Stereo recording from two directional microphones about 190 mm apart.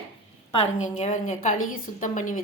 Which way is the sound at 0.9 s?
40° left (ahead or behind).